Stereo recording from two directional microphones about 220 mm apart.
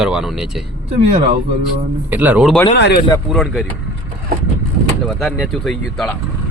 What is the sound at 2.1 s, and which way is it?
Speech, 5° right (ahead or behind).